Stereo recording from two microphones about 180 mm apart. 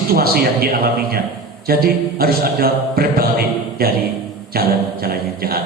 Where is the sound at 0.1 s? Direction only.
55° right (ahead or behind).